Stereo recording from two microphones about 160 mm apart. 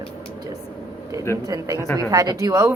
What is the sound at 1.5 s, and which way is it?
A woman's voice, 20° right (ahead or behind).